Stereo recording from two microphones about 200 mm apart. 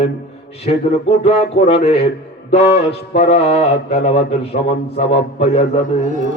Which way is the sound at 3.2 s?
30° left (ahead or behind).